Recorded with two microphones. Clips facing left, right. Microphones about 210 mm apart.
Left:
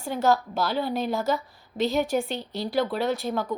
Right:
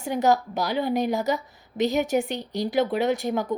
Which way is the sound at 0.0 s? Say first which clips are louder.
Right 1 dB; 15° right (ahead or behind).